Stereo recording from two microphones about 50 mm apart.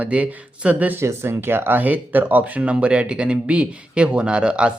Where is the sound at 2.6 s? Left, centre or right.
Right.